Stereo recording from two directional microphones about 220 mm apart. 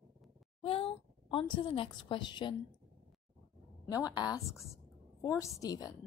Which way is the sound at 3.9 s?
15° left (ahead or behind).